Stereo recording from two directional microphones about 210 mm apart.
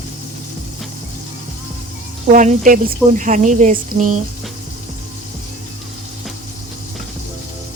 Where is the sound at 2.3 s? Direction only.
35° right (ahead or behind).